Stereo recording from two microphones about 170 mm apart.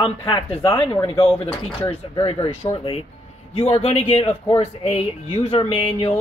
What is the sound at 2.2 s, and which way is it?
Speech, 35° left (ahead or behind).